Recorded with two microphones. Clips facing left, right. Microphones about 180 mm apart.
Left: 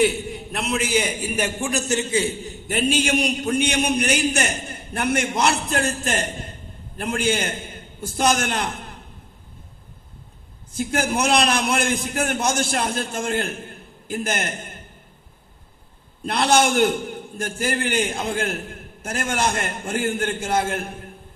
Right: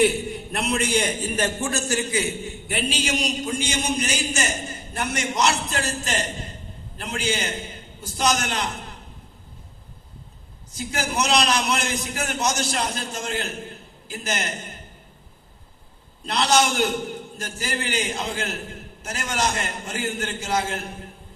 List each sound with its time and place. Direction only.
0.0 s a man's voice: centre (ahead or behind); by 9.0 s 55° left (ahead or behind)
10.8 s a man's voice: 55° left (ahead or behind)
16.2 s a man's voice: 55° left (ahead or behind)